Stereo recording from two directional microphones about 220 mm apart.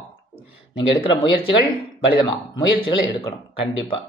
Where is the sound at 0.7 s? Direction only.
25° left (ahead or behind).